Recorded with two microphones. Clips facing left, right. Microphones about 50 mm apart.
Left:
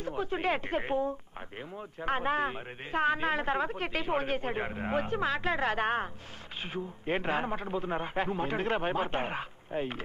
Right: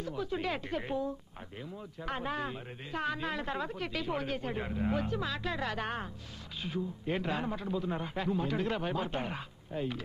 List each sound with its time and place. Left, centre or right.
0.0 s speech: left